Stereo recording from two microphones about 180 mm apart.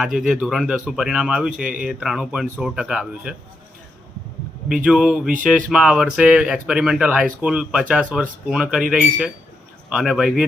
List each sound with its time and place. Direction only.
0.2 s speech: centre (ahead or behind)
4.7 s speech: 5° right (ahead or behind)